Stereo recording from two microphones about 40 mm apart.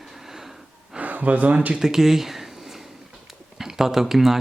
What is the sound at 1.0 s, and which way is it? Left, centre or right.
Speech, right.